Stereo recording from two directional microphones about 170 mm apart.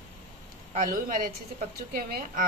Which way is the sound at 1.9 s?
60° right (ahead or behind).